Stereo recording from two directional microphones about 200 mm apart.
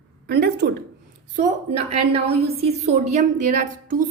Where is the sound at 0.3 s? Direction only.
55° right (ahead or behind).